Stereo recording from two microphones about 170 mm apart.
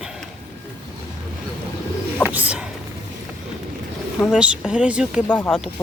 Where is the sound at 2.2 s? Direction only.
10° right (ahead or behind).